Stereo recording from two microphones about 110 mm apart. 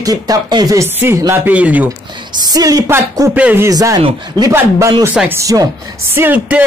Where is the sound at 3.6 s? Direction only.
30° right (ahead or behind).